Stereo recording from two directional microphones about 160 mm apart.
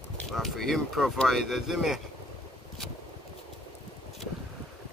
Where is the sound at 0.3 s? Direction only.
Centre (ahead or behind).